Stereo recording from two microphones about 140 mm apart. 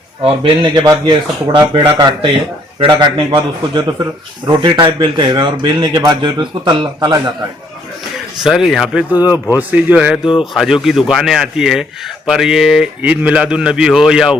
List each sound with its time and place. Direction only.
0.6 s a man's voice: 30° right (ahead or behind)
8.4 s a man's voice: centre (ahead or behind)